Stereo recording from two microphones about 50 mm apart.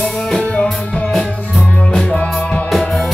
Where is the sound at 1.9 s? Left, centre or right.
Left.